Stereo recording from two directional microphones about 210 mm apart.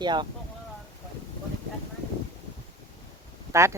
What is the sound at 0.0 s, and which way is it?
Speech, 20° right (ahead or behind).